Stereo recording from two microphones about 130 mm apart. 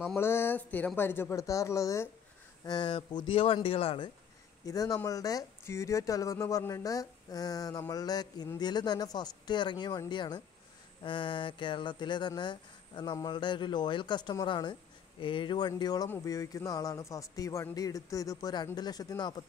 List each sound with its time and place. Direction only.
0.1 s speech: 20° left (ahead or behind)
2.6 s speech: 35° left (ahead or behind)
4.6 s speech: 25° left (ahead or behind)